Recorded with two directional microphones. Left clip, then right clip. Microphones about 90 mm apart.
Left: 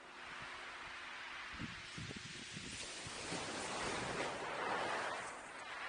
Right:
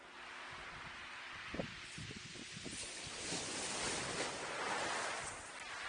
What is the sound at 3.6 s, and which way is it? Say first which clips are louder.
Waves: even; 40° right (ahead or behind).